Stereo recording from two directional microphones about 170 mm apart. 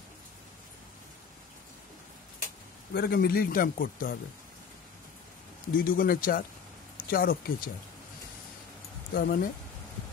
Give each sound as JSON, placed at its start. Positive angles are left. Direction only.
{"t": 2.9, "sound": "speech", "side_deg": 70}
{"t": 5.8, "sound": "speech", "side_deg": 60}
{"t": 9.1, "sound": "speech", "side_deg": 60}